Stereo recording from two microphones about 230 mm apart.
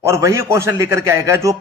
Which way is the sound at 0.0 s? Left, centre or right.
Centre.